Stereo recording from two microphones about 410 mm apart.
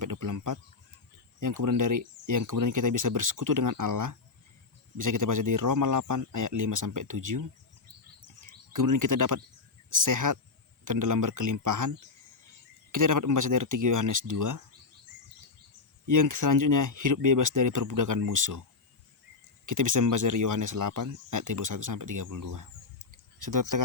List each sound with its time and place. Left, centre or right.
0.0 s speech: right
16.0 s speech: right
19.6 s speech: right